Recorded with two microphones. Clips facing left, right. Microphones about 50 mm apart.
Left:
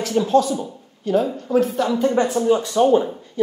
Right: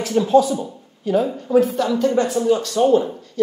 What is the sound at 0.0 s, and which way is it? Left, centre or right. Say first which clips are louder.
Speech: right 2 dB; centre.